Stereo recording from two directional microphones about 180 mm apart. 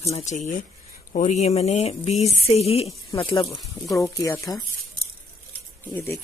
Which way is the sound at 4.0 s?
15° left (ahead or behind).